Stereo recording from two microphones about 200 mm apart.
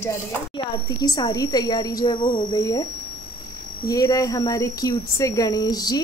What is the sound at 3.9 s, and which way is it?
Speech, 15° left (ahead or behind).